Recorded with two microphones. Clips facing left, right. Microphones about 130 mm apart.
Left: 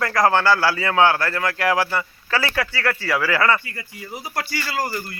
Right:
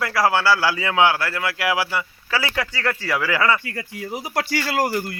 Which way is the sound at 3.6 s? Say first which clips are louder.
Right 5 dB; 90° right.